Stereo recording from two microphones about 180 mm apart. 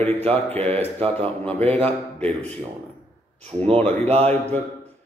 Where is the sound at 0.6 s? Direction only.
35° right (ahead or behind).